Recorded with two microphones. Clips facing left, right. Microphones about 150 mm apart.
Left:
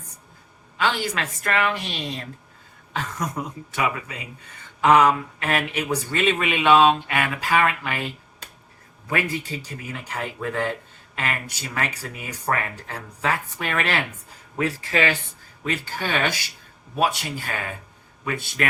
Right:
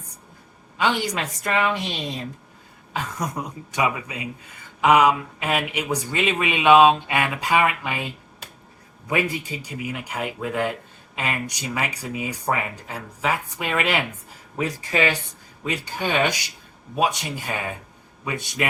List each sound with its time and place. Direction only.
0.8 s a woman's voice: 20° right (ahead or behind)